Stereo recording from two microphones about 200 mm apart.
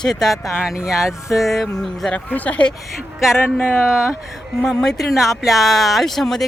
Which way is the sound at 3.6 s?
10° left (ahead or behind).